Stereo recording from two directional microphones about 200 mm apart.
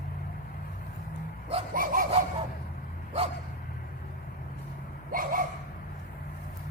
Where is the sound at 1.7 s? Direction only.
45° right (ahead or behind).